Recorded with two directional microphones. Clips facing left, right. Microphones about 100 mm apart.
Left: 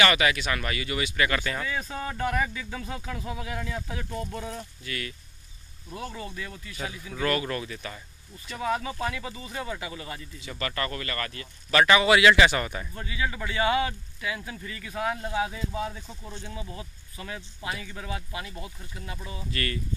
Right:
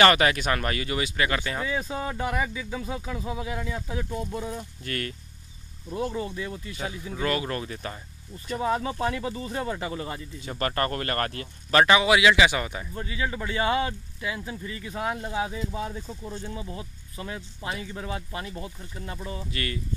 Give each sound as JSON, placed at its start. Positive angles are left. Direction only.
{"t": 0.0, "sound": "speech", "side_deg": -40}
{"t": 4.8, "sound": "speech", "side_deg": -45}
{"t": 5.9, "sound": "speech", "side_deg": -25}
{"t": 7.5, "sound": "speech", "side_deg": -35}
{"t": 11.7, "sound": "speech", "side_deg": -30}
{"t": 12.0, "sound": "speech", "side_deg": -10}
{"t": 13.0, "sound": "speech", "side_deg": -30}
{"t": 19.5, "sound": "speech", "side_deg": -15}